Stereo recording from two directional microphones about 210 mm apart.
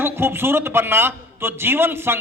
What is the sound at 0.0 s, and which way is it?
A man's voice, 10° right (ahead or behind).